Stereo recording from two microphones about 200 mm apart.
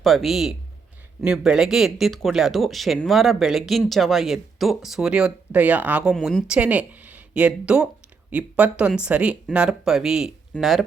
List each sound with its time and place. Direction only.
0.0 s speech: centre (ahead or behind)